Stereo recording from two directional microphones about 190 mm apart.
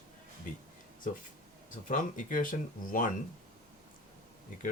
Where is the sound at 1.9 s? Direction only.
45° left (ahead or behind).